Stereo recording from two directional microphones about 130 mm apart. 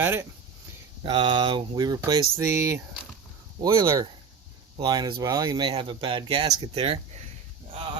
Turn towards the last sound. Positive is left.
turn(degrees=-40)  # may be behind; listen again after turning